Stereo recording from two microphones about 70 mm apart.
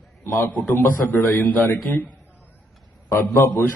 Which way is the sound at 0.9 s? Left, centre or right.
Left.